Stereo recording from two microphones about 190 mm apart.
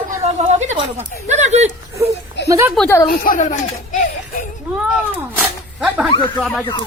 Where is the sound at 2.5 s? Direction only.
15° right (ahead or behind).